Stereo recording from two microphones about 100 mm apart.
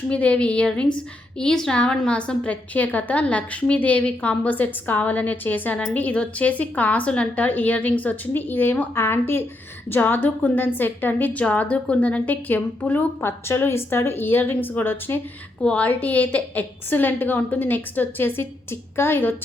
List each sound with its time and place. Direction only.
0.1 s a woman's voice: 10° left (ahead or behind)